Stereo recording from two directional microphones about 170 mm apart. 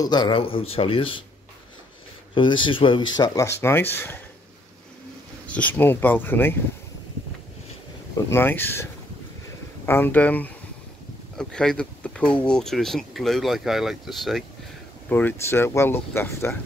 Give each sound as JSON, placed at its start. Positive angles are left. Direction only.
{"t": 0.0, "sound": "speech", "side_deg": 25}
{"t": 2.3, "sound": "speech", "side_deg": 30}
{"t": 5.5, "sound": "speech", "side_deg": 10}
{"t": 8.3, "sound": "speech", "side_deg": 10}
{"t": 9.8, "sound": "speech", "side_deg": 15}
{"t": 15.0, "sound": "speech", "side_deg": 10}